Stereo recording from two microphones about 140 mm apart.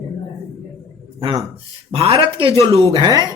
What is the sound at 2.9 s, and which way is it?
Speech, 30° right (ahead or behind).